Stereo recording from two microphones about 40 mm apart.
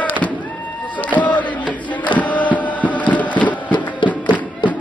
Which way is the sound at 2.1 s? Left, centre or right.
Left.